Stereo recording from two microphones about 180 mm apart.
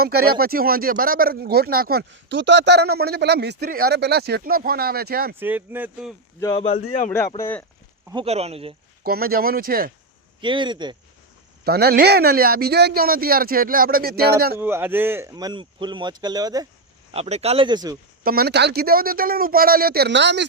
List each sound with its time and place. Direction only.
0.0 s speech: 60° right (ahead or behind)
5.4 s speech: 10° right (ahead or behind)
7.3 s speech: 15° left (ahead or behind)
8.1 s speech: 35° right (ahead or behind)
9.0 s speech: 55° right (ahead or behind)
10.4 s speech: 25° right (ahead or behind)
11.6 s speech: 60° right (ahead or behind)
14.6 s speech: 10° right (ahead or behind)
17.1 s speech: 35° right (ahead or behind)
18.2 s speech: 55° right (ahead or behind); by 20.4 s 75° right (ahead or behind)